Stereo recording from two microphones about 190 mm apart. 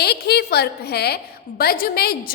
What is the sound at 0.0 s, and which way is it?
A woman's voice, 60° left (ahead or behind).